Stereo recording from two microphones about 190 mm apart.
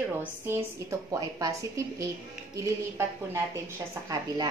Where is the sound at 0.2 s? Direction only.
15° right (ahead or behind).